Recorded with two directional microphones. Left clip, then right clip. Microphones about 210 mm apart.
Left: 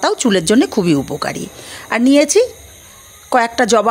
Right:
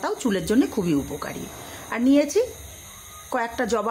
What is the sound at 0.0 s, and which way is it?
Speech, 35° left (ahead or behind).